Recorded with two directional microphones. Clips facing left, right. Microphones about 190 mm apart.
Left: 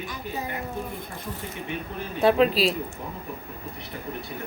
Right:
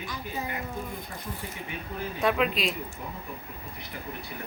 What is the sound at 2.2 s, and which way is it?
Speech, 30° left (ahead or behind).